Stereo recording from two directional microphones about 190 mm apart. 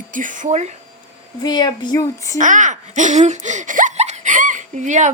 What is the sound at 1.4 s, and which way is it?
Speech, 20° left (ahead or behind).